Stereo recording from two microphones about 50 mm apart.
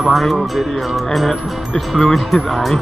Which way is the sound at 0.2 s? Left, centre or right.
Centre.